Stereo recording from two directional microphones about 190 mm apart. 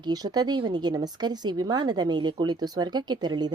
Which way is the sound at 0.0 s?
20° right (ahead or behind).